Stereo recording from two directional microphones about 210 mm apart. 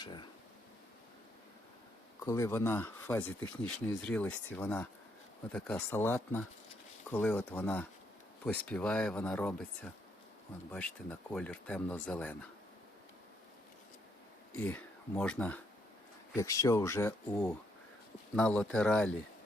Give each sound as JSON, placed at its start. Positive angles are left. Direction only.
{"t": 0.0, "sound": "speech", "side_deg": 20}
{"t": 2.2, "sound": "speech", "side_deg": 15}
{"t": 14.5, "sound": "speech", "side_deg": 10}